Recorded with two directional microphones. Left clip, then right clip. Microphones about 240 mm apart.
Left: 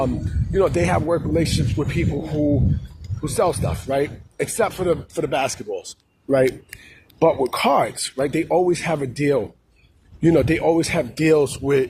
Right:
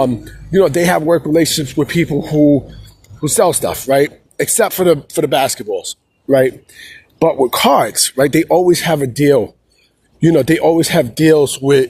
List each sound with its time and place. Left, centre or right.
0.5 s speech: right
7.2 s speech: right